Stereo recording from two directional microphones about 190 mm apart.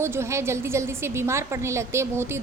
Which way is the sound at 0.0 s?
15° right (ahead or behind).